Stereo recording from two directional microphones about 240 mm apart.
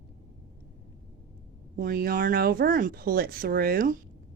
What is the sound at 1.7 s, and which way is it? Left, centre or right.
Speech, right.